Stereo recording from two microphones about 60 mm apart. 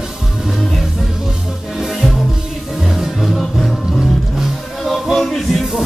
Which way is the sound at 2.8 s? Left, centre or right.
Centre.